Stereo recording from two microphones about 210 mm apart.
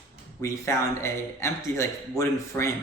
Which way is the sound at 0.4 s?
15° left (ahead or behind).